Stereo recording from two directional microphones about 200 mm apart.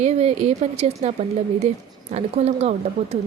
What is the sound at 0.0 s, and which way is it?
Speech, 30° right (ahead or behind).